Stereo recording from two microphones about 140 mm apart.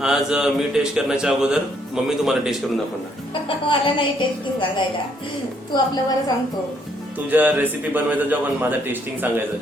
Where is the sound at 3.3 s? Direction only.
40° left (ahead or behind).